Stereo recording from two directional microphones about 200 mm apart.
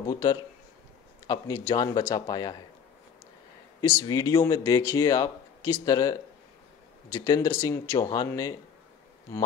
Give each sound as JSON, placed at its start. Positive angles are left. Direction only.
{"t": 0.1, "sound": "a man's voice", "side_deg": 20}
{"t": 4.0, "sound": "speech", "side_deg": 20}